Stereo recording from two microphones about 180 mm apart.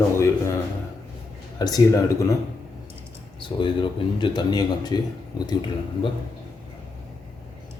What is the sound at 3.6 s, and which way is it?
Speech, 25° left (ahead or behind).